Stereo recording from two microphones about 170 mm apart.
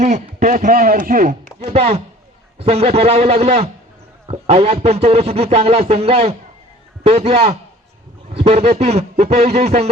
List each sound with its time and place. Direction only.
0.0 s speech: 45° right (ahead or behind)
1.6 s a man's voice: 35° right (ahead or behind)